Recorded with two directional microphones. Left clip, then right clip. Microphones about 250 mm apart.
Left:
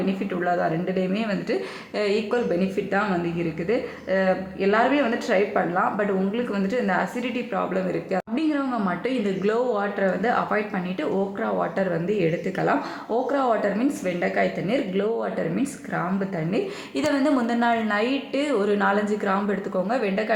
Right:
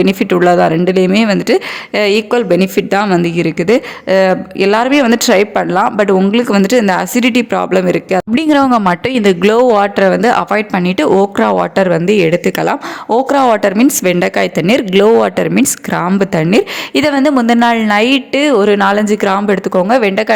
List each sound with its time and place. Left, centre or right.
0.0 s speech: right